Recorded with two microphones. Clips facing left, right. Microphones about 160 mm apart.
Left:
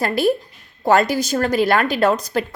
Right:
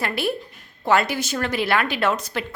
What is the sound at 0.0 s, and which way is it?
A woman's voice, 40° left (ahead or behind).